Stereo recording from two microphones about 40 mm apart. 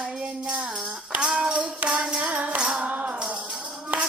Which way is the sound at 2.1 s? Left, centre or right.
Right.